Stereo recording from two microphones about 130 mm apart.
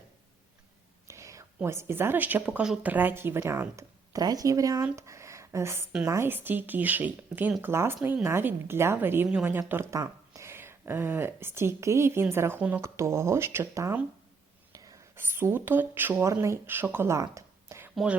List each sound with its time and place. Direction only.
1.0 s whispering: 25° right (ahead or behind)
1.6 s speech: 20° right (ahead or behind)
4.9 s a sound: 20° right (ahead or behind)
6.1 s speech: 20° right (ahead or behind)
17.9 s speech: 5° right (ahead or behind)